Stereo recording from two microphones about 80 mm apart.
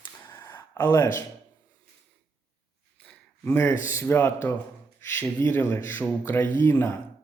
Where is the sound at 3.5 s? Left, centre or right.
Left.